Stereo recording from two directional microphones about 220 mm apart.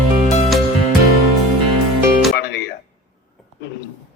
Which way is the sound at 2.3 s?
50° left (ahead or behind).